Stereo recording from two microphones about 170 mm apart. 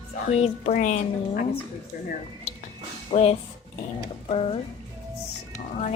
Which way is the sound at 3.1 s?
40° left (ahead or behind).